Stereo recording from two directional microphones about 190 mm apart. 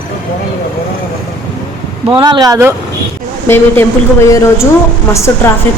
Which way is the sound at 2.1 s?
25° right (ahead or behind).